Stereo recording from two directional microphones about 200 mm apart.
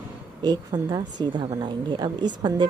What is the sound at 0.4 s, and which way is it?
Speech, 20° right (ahead or behind).